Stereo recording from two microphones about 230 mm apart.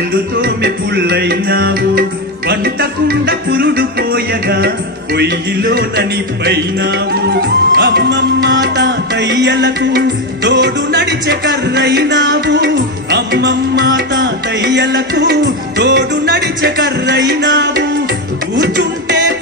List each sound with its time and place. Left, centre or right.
0.4 s music: right